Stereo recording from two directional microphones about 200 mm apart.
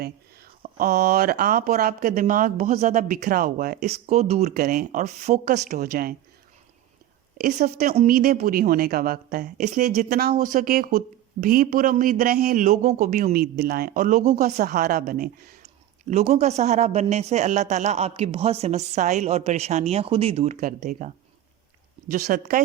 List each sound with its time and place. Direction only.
0.0 s speech: 45° right (ahead or behind)
7.3 s speech: 50° right (ahead or behind)
14.8 s speech: 50° right (ahead or behind)
22.1 s speech: 45° right (ahead or behind)